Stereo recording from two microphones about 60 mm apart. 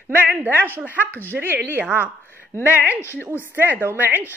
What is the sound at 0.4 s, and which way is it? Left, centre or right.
Speech, right.